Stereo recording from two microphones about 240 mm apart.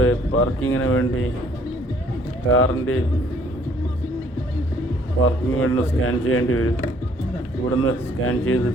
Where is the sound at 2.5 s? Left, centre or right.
Left.